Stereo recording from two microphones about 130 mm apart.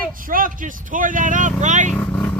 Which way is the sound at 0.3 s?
90° right.